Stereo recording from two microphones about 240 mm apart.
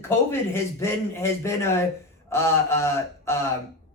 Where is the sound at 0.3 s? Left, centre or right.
Centre.